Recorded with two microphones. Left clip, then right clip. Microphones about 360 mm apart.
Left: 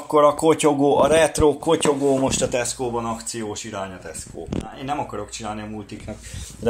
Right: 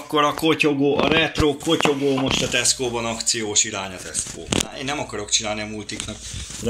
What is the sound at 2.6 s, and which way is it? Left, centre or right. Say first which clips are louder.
Speech: right 2 dB; centre.